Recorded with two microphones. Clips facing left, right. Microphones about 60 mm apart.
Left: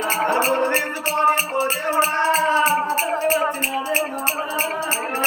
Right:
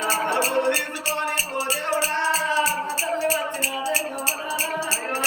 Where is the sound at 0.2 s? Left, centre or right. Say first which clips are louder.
Left 3 dB; left.